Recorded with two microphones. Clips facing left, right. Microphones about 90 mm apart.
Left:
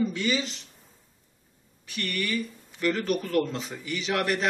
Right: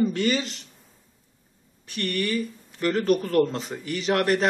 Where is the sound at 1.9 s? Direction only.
35° right (ahead or behind).